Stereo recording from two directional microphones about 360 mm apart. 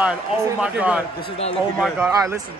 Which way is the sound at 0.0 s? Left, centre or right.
Centre.